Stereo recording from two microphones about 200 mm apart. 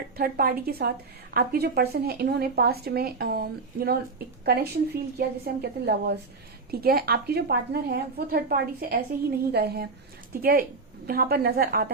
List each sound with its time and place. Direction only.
0.2 s a woman's voice: 45° right (ahead or behind)